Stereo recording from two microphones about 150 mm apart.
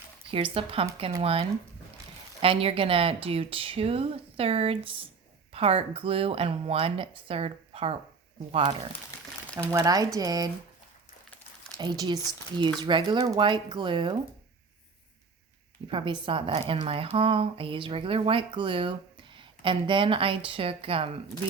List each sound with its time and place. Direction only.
0.3 s speech: 35° right (ahead or behind)
9.7 s speech: 25° right (ahead or behind)
11.8 s speech: 30° right (ahead or behind)
15.9 s speech: 35° right (ahead or behind)